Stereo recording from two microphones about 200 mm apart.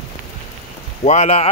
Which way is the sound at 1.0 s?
35° left (ahead or behind).